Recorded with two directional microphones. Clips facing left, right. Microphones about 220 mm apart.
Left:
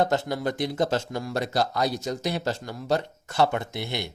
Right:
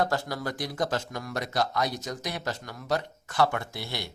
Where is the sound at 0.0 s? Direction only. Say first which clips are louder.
Left 4 dB; 20° left (ahead or behind).